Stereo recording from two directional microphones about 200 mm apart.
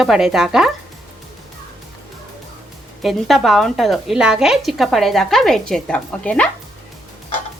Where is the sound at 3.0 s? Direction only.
Centre (ahead or behind).